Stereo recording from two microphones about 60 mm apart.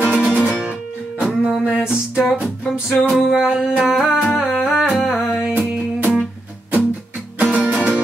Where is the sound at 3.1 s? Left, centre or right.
Centre.